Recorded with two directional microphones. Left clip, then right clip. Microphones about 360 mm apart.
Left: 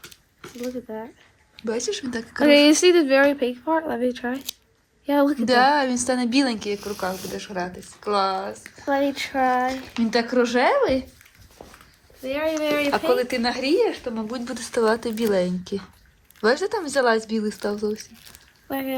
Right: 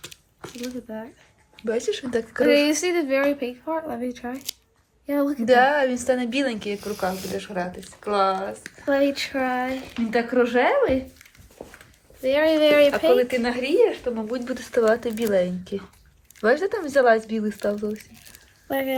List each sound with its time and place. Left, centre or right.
0.6 s a woman's voice: centre
2.4 s speech: left
5.5 s a woman's voice: centre
12.2 s speech: centre
13.1 s a woman's voice: centre